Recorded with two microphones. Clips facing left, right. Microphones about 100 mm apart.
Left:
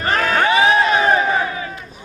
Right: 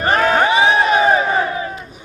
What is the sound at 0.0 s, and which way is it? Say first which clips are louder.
Crowd: right 3 dB; 25° right (ahead or behind).